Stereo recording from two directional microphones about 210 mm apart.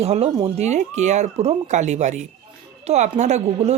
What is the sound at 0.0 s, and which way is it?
Speech, 30° right (ahead or behind).